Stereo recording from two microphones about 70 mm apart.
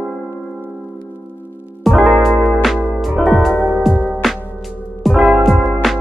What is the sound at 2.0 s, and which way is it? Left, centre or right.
Music, centre.